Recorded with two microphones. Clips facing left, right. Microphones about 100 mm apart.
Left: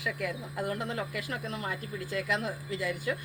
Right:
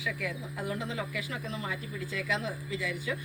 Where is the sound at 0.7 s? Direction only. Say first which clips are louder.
Even; 55° left (ahead or behind).